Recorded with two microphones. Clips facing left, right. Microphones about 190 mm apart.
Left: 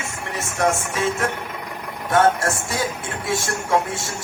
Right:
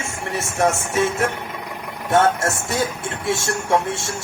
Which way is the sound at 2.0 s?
25° right (ahead or behind).